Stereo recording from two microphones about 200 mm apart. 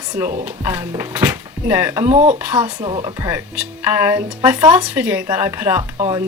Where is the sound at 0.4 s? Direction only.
10° right (ahead or behind).